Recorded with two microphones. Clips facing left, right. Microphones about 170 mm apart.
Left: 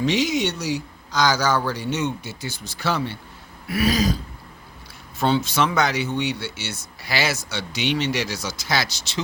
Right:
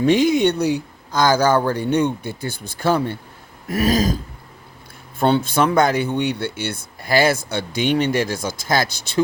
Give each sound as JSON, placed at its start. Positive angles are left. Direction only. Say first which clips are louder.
{"t": 0.0, "sound": "speech", "louder": "right 6 dB", "side_deg": -55}
{"t": 5.2, "sound": "speech", "louder": "right 4 dB", "side_deg": -55}